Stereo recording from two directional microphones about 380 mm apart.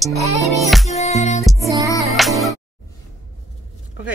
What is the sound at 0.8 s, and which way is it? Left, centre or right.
Music, centre.